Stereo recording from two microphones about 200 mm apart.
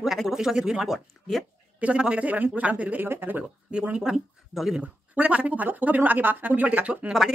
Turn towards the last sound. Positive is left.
turn(degrees=-5)  # may be behind; listen again after turning